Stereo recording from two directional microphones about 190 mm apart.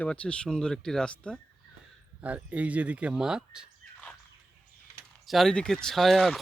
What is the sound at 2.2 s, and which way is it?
Speech, 5° right (ahead or behind).